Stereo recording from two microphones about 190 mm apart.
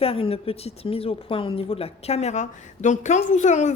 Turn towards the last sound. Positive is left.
turn(degrees=40)  # may be behind; listen again after turning